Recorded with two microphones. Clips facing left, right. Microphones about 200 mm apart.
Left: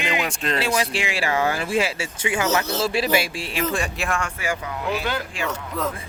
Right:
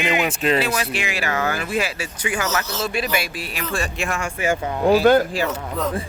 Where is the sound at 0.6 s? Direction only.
30° left (ahead or behind).